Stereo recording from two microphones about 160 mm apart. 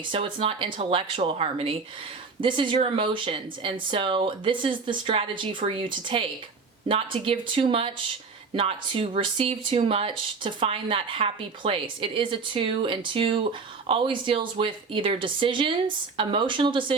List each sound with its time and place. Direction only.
0.1 s speech: 35° right (ahead or behind)